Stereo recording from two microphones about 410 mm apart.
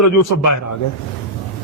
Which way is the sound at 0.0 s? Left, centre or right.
Left.